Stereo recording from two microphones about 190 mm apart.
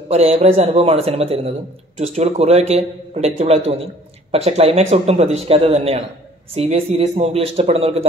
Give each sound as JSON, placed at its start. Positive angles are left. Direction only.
{"t": 0.1, "sound": "speech", "side_deg": -35}